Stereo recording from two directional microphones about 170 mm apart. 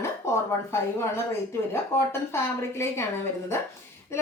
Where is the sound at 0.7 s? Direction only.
15° left (ahead or behind).